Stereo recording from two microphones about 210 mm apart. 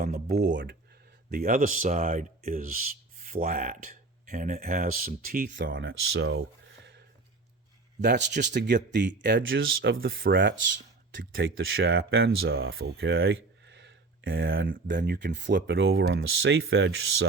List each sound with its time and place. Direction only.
0.5 s speech: 60° right (ahead or behind)
1.3 s speech: 40° right (ahead or behind)
5.5 s speech: 60° right (ahead or behind)
8.0 s speech: 55° right (ahead or behind); by 12.5 s 70° right (ahead or behind)
12.8 s speech: 50° right (ahead or behind)
13.1 s speech: 70° right (ahead or behind)